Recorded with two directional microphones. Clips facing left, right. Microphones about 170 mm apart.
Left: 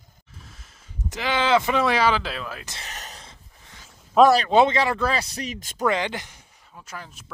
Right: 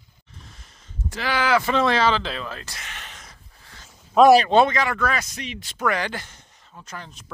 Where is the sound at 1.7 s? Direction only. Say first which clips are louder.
Right 1 dB; 10° left (ahead or behind).